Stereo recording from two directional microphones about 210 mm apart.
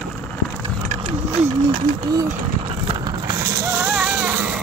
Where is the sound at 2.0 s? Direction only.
15° right (ahead or behind).